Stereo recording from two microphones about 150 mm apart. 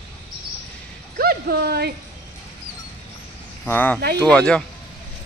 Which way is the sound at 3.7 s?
10° left (ahead or behind).